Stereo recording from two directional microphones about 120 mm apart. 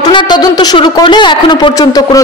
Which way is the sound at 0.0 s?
40° left (ahead or behind).